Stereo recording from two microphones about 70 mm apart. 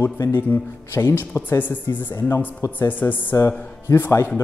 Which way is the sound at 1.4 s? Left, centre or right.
Left.